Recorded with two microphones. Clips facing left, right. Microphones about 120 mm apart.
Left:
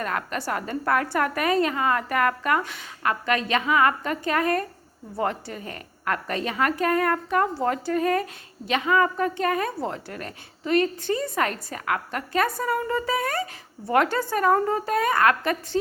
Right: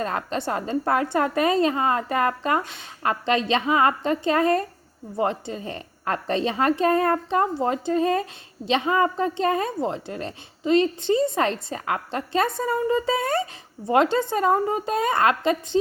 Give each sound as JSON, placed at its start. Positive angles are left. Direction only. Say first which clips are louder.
{"t": 0.0, "sound": "a woman's voice", "louder": "right 2 dB", "side_deg": -25}